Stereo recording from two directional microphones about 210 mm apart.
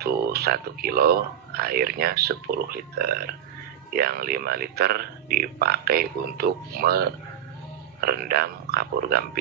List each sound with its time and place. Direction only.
0.0 s speech: 50° right (ahead or behind)